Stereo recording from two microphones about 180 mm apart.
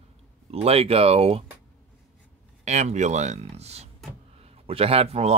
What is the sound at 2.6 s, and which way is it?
Speech, 40° right (ahead or behind).